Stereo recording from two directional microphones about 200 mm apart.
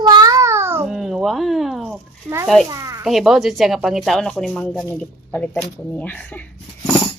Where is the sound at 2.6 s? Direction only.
15° right (ahead or behind).